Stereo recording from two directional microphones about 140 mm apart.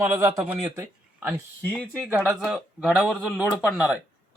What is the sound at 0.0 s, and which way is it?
Speech, 20° right (ahead or behind).